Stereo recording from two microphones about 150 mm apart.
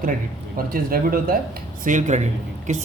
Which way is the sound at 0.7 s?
75° right (ahead or behind).